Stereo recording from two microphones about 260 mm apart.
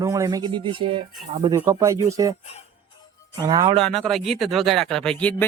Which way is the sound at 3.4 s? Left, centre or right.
Centre.